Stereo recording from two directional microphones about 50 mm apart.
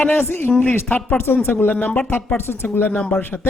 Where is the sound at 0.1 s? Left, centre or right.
Left.